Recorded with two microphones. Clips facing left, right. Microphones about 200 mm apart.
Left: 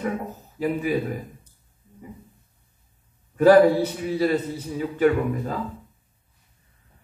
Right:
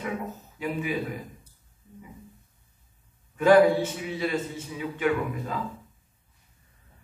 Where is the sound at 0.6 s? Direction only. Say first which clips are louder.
Left 7 dB; 40° left (ahead or behind).